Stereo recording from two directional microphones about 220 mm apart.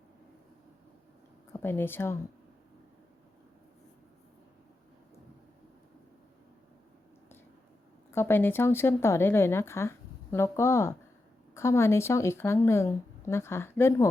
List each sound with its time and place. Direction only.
1.5 s speech: 10° left (ahead or behind)
8.1 s speech: 10° left (ahead or behind)